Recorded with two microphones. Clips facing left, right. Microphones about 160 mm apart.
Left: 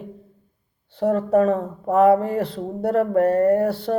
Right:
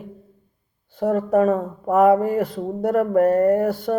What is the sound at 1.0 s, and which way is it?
A woman's voice, 30° left (ahead or behind).